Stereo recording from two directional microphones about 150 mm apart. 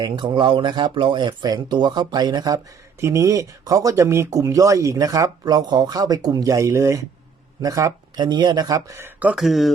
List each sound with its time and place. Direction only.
0.0 s speech: 30° right (ahead or behind)
9.2 s speech: 5° right (ahead or behind)